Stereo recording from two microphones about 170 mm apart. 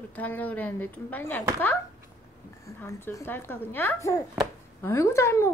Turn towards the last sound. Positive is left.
turn(degrees=15)  # may be behind; listen again after turning